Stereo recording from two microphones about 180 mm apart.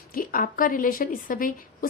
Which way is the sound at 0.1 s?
50° left (ahead or behind).